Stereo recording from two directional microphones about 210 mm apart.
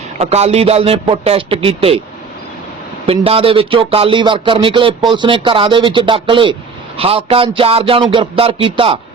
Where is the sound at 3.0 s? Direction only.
25° right (ahead or behind).